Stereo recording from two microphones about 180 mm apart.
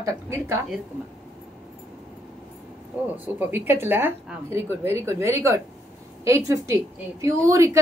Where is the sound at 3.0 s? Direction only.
10° right (ahead or behind).